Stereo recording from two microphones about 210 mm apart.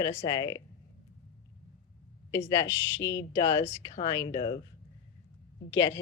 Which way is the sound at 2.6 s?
60° left (ahead or behind).